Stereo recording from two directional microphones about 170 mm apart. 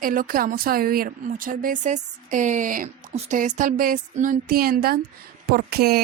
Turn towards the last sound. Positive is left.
turn(degrees=-65)  # may be behind; listen again after turning